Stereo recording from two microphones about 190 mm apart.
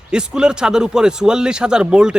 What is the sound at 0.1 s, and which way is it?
Speech, 5° right (ahead or behind).